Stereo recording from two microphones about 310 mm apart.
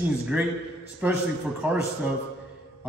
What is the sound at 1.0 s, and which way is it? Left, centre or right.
Speech, centre.